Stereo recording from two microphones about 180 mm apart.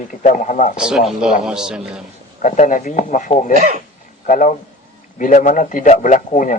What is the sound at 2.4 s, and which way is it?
A man's voice, 45° left (ahead or behind).